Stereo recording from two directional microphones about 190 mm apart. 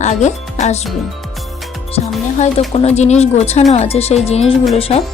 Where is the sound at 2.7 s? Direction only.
35° left (ahead or behind).